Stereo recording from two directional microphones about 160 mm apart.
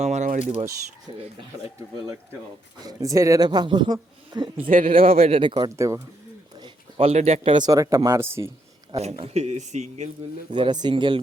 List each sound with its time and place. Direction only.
0.0 s a sound: 45° right (ahead or behind)
1.1 s speech: 30° right (ahead or behind)
2.8 s speech: 20° right (ahead or behind)
4.9 s speech: 35° right (ahead or behind); by 6.0 s 20° right (ahead or behind)
6.6 s a sound: 30° right (ahead or behind)
7.1 s speech: 45° right (ahead or behind); by 8.5 s 15° right (ahead or behind)
9.1 s speech: 40° right (ahead or behind)
10.5 s speech: 25° right (ahead or behind)